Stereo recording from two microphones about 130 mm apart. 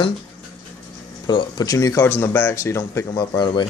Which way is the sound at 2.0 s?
15° left (ahead or behind).